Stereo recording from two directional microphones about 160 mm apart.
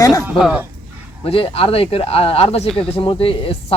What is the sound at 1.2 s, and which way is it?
Speech, 35° left (ahead or behind).